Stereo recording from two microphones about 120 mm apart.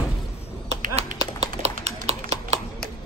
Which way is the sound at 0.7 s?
65° right (ahead or behind).